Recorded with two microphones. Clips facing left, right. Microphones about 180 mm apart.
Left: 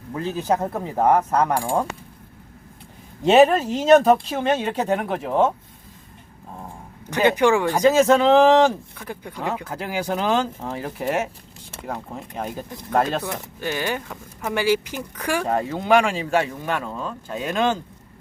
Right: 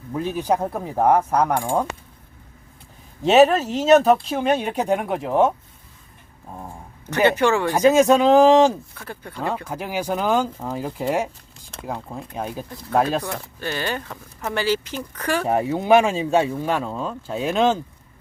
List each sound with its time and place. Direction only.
0.1 s speech: 15° right (ahead or behind)
3.2 s speech: centre (ahead or behind)
7.3 s speech: 15° left (ahead or behind)
7.7 s speech: 15° right (ahead or behind)
9.0 s speech: 15° left (ahead or behind)
9.6 s speech: 10° right (ahead or behind)
13.2 s speech: 15° left (ahead or behind)
15.4 s speech: 15° right (ahead or behind)